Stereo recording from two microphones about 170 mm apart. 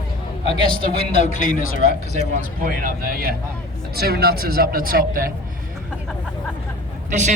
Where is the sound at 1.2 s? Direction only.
50° left (ahead or behind).